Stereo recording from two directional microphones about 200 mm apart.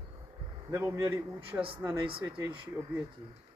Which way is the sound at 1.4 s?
25° right (ahead or behind).